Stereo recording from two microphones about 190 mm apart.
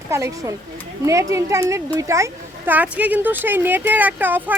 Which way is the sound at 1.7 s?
15° right (ahead or behind).